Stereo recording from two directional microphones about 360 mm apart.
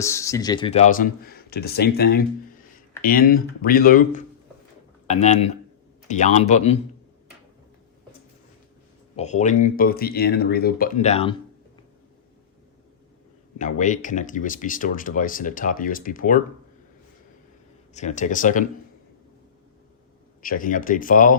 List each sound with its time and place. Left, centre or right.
0.0 s speech: centre
9.1 s speech: centre
13.6 s speech: left
17.9 s speech: centre
20.4 s speech: left